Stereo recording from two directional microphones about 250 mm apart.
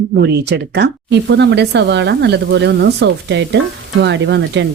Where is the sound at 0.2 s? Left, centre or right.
Right.